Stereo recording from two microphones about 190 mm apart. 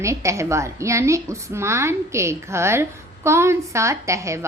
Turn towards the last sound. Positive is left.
turn(degrees=-15)  # may be behind; listen again after turning